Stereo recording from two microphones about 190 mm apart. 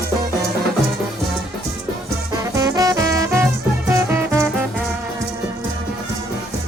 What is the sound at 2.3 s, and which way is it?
Music, 20° right (ahead or behind).